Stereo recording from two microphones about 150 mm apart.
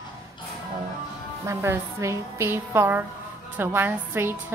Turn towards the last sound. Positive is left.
turn(degrees=-15)  # may be behind; listen again after turning